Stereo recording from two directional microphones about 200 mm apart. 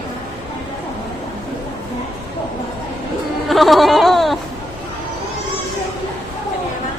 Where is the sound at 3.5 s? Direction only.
Centre (ahead or behind).